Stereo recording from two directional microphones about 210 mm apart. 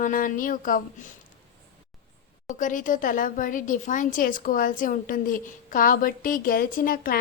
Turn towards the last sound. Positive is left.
turn(degrees=40)  # may be behind; listen again after turning